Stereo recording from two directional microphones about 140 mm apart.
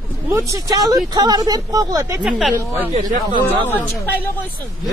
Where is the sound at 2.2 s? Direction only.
Centre (ahead or behind).